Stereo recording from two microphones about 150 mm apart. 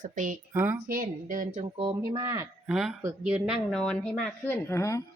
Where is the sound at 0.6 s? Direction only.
15° right (ahead or behind).